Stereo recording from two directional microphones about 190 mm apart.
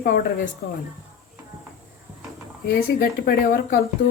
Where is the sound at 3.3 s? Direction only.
50° left (ahead or behind).